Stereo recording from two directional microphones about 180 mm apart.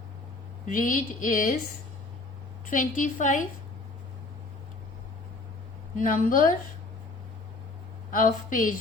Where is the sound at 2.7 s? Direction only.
45° left (ahead or behind).